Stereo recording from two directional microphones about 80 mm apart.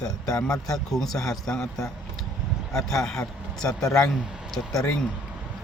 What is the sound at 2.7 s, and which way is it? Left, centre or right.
Speech, centre.